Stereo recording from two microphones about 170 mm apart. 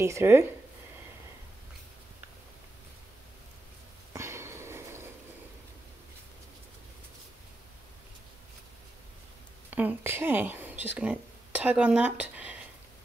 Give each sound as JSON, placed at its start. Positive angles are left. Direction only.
{"t": 0.0, "sound": "speech", "side_deg": -15}
{"t": 4.1, "sound": "sniff", "side_deg": -15}
{"t": 9.7, "sound": "speech", "side_deg": -10}